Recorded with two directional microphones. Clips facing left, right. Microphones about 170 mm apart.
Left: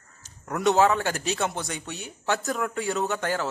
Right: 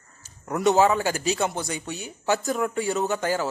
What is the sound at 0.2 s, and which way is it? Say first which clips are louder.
A man's voice: right 2 dB; centre (ahead or behind).